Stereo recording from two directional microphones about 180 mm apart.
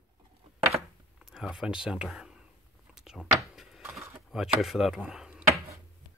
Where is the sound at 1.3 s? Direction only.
Centre (ahead or behind).